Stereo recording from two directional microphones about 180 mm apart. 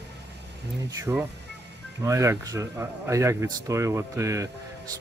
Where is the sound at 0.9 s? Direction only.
15° right (ahead or behind).